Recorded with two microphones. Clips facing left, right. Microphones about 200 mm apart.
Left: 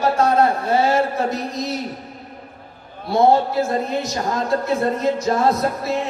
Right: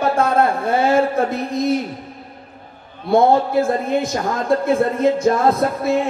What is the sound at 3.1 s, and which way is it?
A man's voice, 55° right (ahead or behind).